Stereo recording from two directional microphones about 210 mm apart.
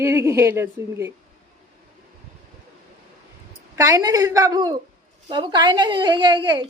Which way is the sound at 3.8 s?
15° right (ahead or behind).